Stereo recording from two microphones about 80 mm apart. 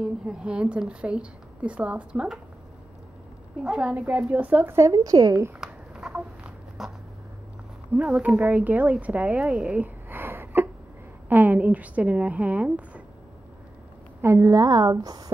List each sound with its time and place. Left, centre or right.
0.0 s a woman's voice: centre
3.6 s a woman's voice: centre
4.6 s a woman's voice: right
5.6 s a sound: centre
6.8 s writing: centre
7.9 s a woman's voice: centre
14.2 s a woman's voice: right